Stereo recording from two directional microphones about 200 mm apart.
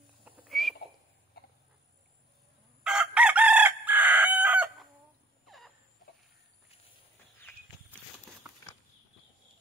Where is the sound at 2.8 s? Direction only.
5° right (ahead or behind).